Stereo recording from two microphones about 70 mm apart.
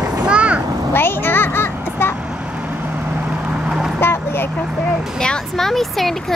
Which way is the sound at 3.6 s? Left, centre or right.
Centre.